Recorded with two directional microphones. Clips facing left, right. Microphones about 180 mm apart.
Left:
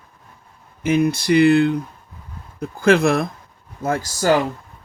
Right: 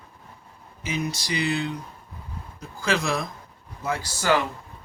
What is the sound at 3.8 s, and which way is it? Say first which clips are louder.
Speech: left 6 dB; 45° left (ahead or behind).